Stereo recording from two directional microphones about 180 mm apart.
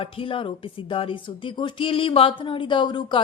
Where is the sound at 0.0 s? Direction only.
30° left (ahead or behind).